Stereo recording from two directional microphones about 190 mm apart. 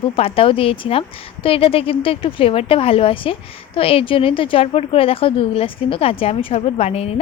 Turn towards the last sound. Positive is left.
turn(degrees=30)  # may be behind; listen again after turning